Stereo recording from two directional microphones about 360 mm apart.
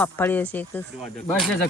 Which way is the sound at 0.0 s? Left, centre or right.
Centre.